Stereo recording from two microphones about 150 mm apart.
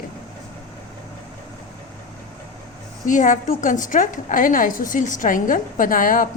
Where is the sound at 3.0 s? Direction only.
60° left (ahead or behind).